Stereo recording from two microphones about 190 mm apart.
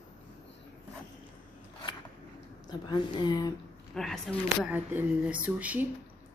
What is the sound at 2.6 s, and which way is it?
Speech, 25° left (ahead or behind).